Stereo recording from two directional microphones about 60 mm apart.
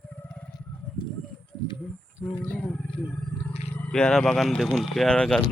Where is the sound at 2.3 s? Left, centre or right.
Left.